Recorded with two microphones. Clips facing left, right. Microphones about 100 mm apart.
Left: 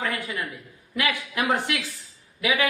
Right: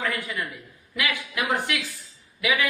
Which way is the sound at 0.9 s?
35° left (ahead or behind).